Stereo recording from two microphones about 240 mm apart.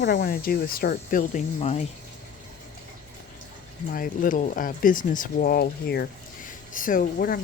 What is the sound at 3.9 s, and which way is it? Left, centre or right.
Speech, left.